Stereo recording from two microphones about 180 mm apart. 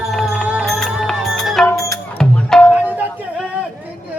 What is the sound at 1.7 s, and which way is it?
Music, 15° left (ahead or behind).